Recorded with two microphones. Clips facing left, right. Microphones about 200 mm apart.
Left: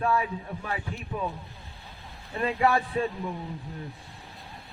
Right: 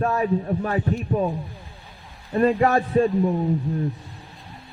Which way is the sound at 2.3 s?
45° right (ahead or behind).